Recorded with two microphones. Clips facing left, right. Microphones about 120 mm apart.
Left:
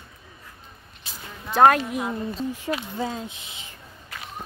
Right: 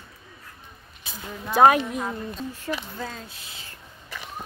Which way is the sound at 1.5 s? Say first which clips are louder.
Even; centre (ahead or behind).